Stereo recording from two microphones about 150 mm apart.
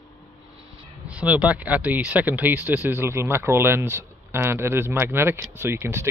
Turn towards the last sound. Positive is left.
turn(degrees=-15)  # may be behind; listen again after turning